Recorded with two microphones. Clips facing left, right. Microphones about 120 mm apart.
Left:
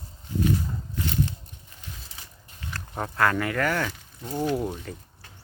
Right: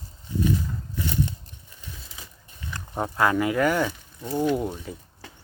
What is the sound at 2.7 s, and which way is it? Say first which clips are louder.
Speech: right 3 dB; 15° right (ahead or behind).